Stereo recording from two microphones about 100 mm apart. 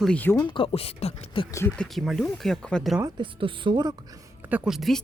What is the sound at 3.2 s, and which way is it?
Speech, 55° right (ahead or behind).